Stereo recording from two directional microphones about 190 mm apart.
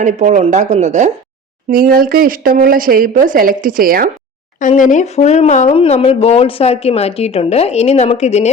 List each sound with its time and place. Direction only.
0.0 s speech: 40° right (ahead or behind)
1.7 s a woman's voice: 50° right (ahead or behind)
4.6 s speech: 40° left (ahead or behind)